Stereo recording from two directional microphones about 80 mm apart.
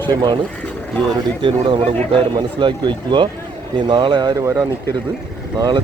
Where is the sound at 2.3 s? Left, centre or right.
Right.